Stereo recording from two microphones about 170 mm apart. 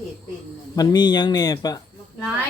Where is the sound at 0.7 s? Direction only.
25° left (ahead or behind).